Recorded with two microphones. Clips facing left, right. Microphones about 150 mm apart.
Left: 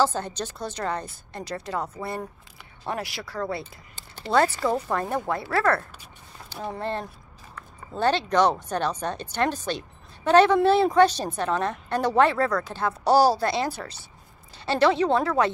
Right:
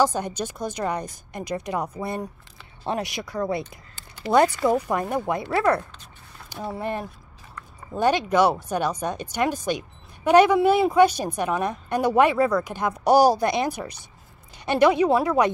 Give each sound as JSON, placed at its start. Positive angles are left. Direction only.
{"t": 0.0, "sound": "speech", "side_deg": -15}